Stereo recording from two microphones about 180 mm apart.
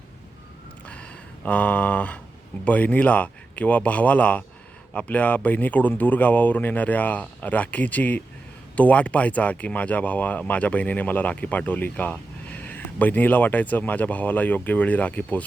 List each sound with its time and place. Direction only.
1.5 s speech: 10° left (ahead or behind)